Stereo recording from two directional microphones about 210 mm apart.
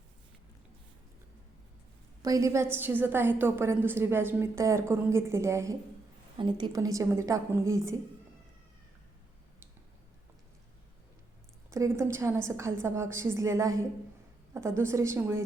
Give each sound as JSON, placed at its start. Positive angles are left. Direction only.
{"t": 2.2, "sound": "a woman's voice", "side_deg": -15}
{"t": 11.7, "sound": "a woman's voice", "side_deg": -15}